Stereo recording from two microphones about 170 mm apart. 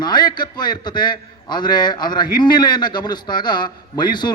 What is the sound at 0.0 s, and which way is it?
A man's voice, 25° left (ahead or behind).